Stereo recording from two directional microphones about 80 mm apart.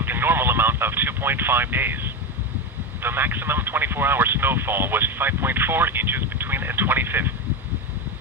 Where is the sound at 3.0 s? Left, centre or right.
Right.